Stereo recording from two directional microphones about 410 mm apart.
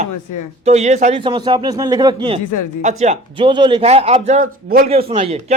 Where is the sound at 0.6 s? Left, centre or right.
Centre.